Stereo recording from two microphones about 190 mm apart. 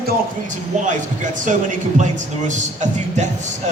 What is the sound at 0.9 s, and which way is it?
Speech, 40° right (ahead or behind).